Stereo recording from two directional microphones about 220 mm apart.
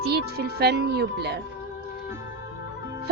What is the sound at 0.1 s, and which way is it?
A woman's voice, 45° right (ahead or behind).